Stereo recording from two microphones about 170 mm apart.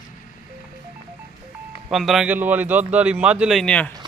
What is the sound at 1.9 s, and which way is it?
Speech, centre (ahead or behind).